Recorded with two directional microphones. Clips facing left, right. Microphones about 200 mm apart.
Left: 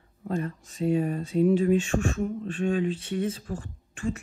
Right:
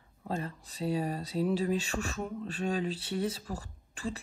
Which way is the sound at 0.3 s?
30° right (ahead or behind).